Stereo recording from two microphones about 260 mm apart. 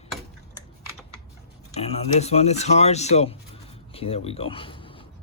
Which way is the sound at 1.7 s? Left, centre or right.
Left.